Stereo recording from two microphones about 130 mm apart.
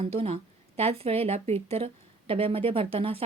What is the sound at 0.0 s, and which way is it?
A woman's voice, 50° right (ahead or behind).